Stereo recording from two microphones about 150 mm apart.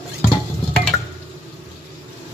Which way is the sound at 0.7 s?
Centre (ahead or behind).